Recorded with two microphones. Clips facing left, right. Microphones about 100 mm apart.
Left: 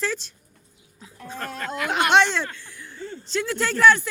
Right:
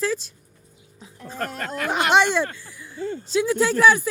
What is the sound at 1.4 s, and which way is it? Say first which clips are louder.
Speech: right 1 dB; 45° right (ahead or behind).